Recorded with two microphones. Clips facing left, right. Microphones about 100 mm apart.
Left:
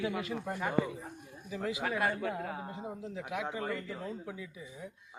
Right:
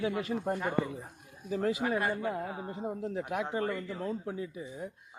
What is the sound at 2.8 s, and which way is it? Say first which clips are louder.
Speech: right 6 dB; 50° right (ahead or behind).